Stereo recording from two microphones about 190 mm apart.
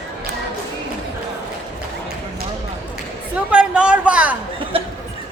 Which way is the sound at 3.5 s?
5° right (ahead or behind).